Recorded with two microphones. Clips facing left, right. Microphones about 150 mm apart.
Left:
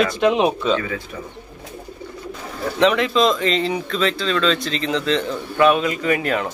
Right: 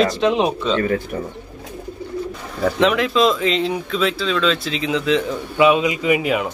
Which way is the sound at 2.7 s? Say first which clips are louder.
Left 1 dB; centre (ahead or behind).